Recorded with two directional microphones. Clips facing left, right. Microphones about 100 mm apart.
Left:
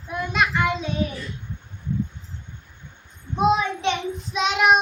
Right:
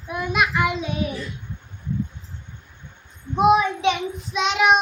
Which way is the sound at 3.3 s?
15° right (ahead or behind).